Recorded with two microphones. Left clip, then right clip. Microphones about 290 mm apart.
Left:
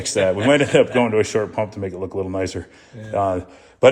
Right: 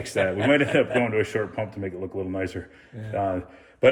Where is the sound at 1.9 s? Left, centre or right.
Left.